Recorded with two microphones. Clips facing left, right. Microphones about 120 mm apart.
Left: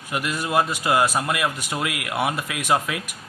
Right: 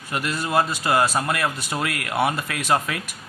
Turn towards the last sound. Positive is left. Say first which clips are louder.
# even
turn(degrees=10)  # may be behind; listen again after turning